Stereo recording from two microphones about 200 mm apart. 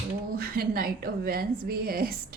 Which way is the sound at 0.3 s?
50° right (ahead or behind).